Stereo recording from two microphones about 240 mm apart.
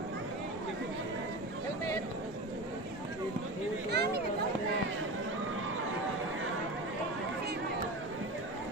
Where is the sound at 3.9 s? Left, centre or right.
Right.